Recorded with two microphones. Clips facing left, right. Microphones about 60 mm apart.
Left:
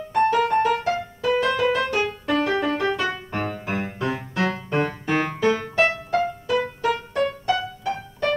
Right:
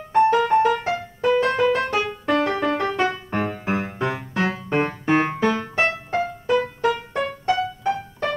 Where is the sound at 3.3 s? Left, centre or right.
Centre.